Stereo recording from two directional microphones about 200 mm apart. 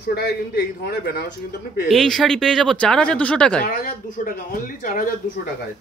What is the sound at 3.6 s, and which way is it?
A man's voice, 45° left (ahead or behind).